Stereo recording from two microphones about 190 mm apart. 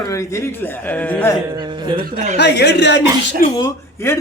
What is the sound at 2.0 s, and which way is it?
Speech, 45° right (ahead or behind).